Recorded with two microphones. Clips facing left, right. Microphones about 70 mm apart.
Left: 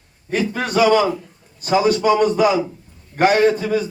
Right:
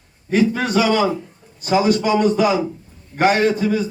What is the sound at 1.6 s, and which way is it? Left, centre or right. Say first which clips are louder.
Speech: even; left.